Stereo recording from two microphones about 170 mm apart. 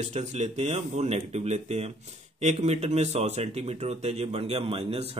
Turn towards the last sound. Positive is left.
turn(degrees=-35)  # may be behind; listen again after turning